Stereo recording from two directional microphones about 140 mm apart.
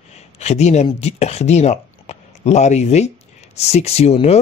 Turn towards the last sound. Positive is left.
turn(degrees=50)  # may be behind; listen again after turning